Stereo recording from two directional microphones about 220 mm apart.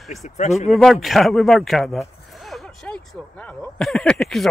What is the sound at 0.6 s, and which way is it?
Speech, centre (ahead or behind).